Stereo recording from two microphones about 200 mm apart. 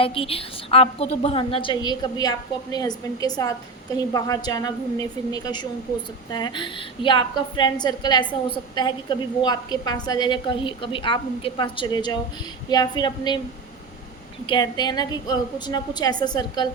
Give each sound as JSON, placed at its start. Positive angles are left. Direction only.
{"t": 0.0, "sound": "a woman's voice", "side_deg": 25}
{"t": 14.4, "sound": "a woman's voice", "side_deg": 20}